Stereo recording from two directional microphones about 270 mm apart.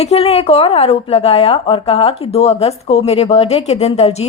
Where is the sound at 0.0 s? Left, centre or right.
Left.